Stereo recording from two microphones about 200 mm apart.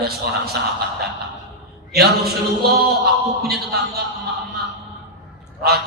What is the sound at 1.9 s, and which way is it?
A man's voice, 50° right (ahead or behind).